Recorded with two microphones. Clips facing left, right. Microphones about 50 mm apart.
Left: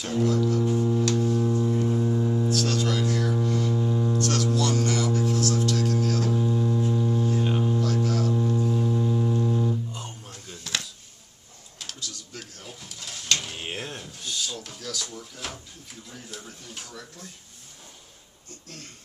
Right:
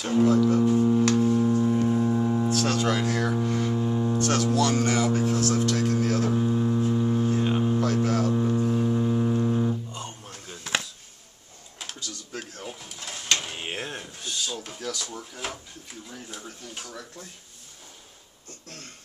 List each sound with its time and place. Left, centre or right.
0.0 s speech: centre
1.2 s a sound: right
7.4 s mains hum: centre
9.8 s music: centre
10.2 s a sound: right
12.6 s drawer open or close: centre
13.0 s a sound: centre
15.4 s drawer open or close: centre
16.3 s speech: centre